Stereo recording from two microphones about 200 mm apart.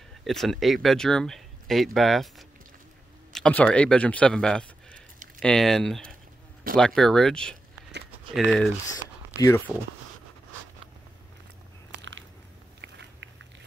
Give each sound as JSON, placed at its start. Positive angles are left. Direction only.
{"t": 0.2, "sound": "a man's voice", "side_deg": 0}
{"t": 12.0, "sound": "biting", "side_deg": -70}